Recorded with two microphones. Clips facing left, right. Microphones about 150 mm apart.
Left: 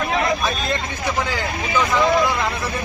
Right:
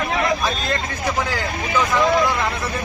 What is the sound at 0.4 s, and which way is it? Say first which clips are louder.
Speech: even; centre (ahead or behind).